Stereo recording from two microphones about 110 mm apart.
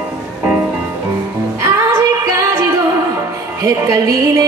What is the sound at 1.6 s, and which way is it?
Music, 25° right (ahead or behind).